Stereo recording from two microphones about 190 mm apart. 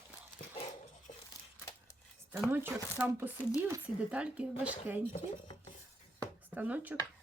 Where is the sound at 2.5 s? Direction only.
10° right (ahead or behind).